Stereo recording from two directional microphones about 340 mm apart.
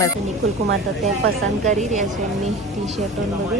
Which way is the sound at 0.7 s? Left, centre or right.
Right.